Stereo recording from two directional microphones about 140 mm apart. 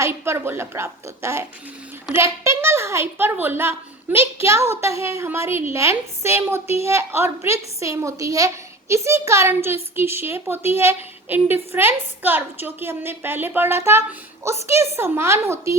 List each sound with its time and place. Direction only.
0.0 s a woman's voice: 15° right (ahead or behind)